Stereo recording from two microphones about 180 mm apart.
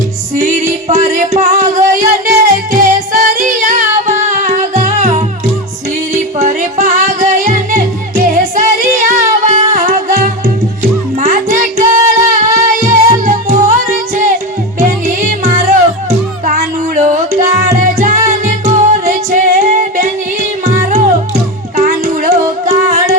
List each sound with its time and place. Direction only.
0.9 s music: 40° right (ahead or behind)
6.4 s music: 40° right (ahead or behind)
11.2 s music: 45° right (ahead or behind)
21.8 s music: 40° right (ahead or behind)